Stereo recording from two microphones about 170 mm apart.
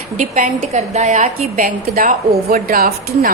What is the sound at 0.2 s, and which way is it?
Speech, 55° right (ahead or behind).